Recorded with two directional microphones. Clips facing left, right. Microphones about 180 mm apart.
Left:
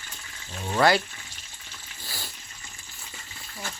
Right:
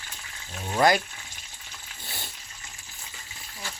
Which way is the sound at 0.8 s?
20° right (ahead or behind).